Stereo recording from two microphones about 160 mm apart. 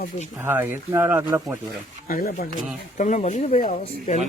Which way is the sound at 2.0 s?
65° left (ahead or behind).